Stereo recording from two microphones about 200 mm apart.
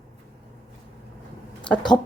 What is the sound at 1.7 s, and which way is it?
Speech, 20° left (ahead or behind).